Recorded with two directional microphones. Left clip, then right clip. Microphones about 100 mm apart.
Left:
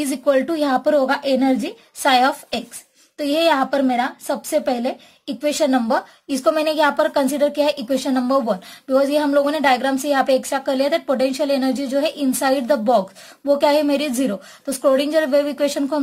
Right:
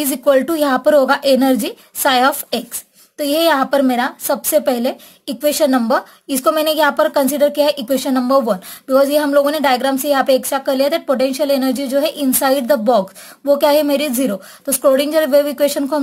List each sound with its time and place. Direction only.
0.0 s a woman's voice: 50° right (ahead or behind); by 1.7 s 65° right (ahead or behind)
2.0 s a woman's voice: 45° right (ahead or behind)
3.2 s speech: 35° right (ahead or behind)
3.5 s speech: 50° right (ahead or behind); by 16.0 s 35° right (ahead or behind)